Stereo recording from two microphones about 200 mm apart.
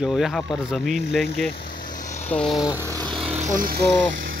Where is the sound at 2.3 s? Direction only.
5° left (ahead or behind); by 3.2 s 20° right (ahead or behind).